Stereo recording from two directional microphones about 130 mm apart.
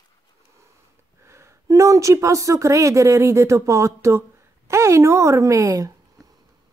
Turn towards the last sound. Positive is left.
turn(degrees=-25)  # may be behind; listen again after turning